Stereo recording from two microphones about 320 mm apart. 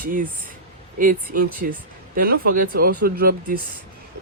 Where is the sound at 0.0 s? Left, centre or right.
Right.